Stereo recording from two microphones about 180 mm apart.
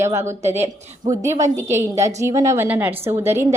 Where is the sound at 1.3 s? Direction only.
40° right (ahead or behind).